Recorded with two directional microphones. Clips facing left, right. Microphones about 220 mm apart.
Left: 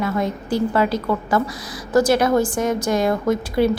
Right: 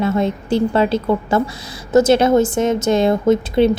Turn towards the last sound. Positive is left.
turn(degrees=-25)  # may be behind; listen again after turning